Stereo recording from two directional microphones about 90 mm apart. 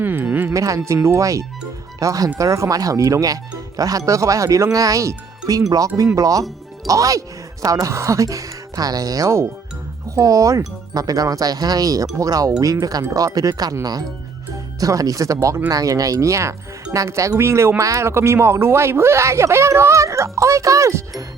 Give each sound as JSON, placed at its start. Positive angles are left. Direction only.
{"t": 0.0, "sound": "music", "side_deg": -20}
{"t": 0.5, "sound": "speech", "side_deg": -40}
{"t": 14.8, "sound": "speech", "side_deg": -40}